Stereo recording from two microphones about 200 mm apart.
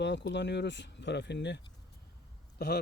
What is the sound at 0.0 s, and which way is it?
Speech, 60° left (ahead or behind).